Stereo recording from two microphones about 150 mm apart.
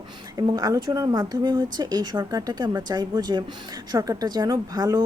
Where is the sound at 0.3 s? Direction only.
25° right (ahead or behind).